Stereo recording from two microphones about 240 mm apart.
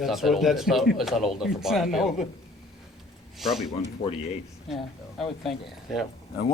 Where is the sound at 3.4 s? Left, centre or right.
Centre.